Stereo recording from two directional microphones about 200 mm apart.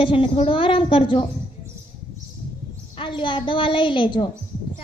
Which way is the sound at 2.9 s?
25° left (ahead or behind).